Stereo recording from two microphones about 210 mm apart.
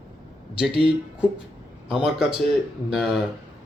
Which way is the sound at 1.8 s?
Centre (ahead or behind).